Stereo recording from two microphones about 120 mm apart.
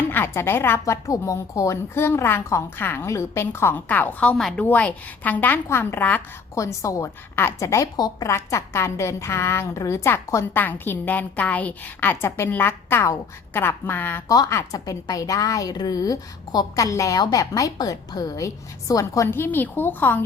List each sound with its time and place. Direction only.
0.1 s a woman's voice: 20° left (ahead or behind)
6.5 s a woman's voice: 25° left (ahead or behind)
14.3 s a woman's voice: 30° left (ahead or behind)